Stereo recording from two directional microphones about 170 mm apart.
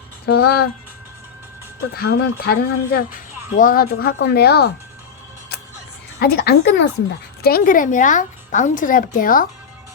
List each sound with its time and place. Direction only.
0.3 s speech: 70° left (ahead or behind)
2.0 s speech: 65° left (ahead or behind)
3.5 s speech: 55° left (ahead or behind); by 4.7 s 70° left (ahead or behind)
6.1 s speech: 70° left (ahead or behind)
7.4 s speech: 60° left (ahead or behind)